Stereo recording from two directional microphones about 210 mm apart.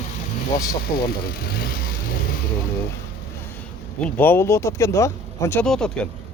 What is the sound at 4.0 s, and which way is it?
Speech, 5° left (ahead or behind).